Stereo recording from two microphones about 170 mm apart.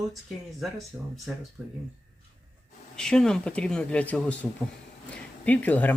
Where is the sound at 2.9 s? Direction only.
5° left (ahead or behind).